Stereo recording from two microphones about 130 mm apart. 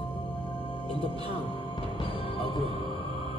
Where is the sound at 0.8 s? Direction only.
45° left (ahead or behind).